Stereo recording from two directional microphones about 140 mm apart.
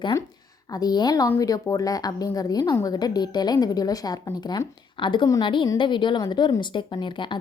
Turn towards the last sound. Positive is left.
turn(degrees=35)  # may be behind; listen again after turning